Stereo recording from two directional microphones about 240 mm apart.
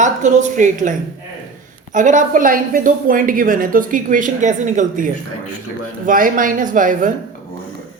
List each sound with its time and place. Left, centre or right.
0.0 s a woman's voice: right